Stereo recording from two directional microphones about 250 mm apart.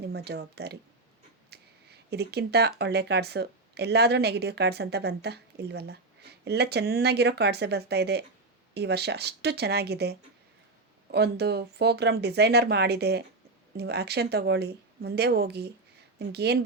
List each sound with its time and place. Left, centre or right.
0.1 s speech: right